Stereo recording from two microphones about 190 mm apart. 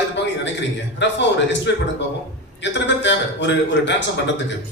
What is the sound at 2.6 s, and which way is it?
A man's voice, 70° left (ahead or behind).